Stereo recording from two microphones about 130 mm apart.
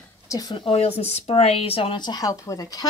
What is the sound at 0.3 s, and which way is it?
Speech, 30° left (ahead or behind).